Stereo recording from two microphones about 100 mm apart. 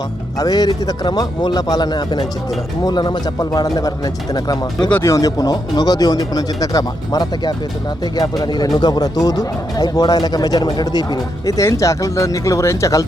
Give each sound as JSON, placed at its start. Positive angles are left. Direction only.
{"t": 0.3, "sound": "speech", "side_deg": 40}